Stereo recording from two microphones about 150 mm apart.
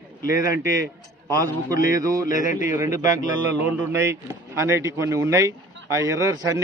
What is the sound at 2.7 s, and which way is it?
Speech, 20° right (ahead or behind).